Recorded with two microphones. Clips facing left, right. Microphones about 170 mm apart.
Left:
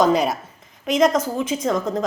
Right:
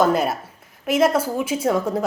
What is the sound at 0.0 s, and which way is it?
Speech, 5° right (ahead or behind).